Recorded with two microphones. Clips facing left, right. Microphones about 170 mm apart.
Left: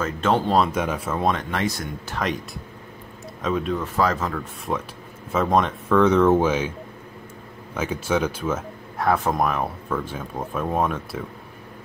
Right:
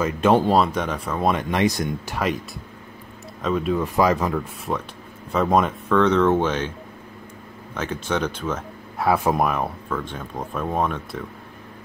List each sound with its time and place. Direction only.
0.0 s speech: 10° right (ahead or behind)
0.6 s speech: 5° left (ahead or behind)
1.3 s speech: 15° right (ahead or behind)
3.4 s speech: centre (ahead or behind)
4.7 s speech: centre (ahead or behind)
7.7 s speech: 5° left (ahead or behind)
9.0 s speech: 10° right (ahead or behind)
9.8 s speech: 5° left (ahead or behind)